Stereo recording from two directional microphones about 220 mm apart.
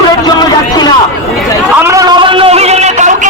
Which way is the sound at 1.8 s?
15° right (ahead or behind).